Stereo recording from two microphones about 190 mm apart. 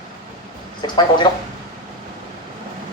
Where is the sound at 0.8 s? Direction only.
25° left (ahead or behind).